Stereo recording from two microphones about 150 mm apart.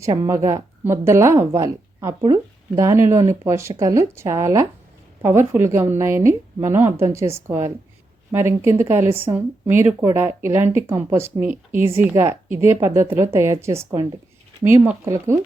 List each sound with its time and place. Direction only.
0.0 s a woman's voice: 20° right (ahead or behind)